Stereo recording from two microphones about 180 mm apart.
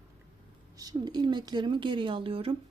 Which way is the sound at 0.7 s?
20° right (ahead or behind).